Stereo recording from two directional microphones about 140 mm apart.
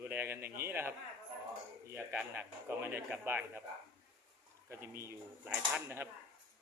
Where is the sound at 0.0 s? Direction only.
15° right (ahead or behind).